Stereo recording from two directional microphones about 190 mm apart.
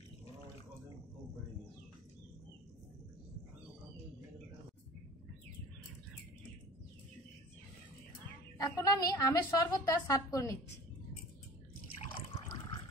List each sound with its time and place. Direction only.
8.6 s a woman's voice: 20° left (ahead or behind)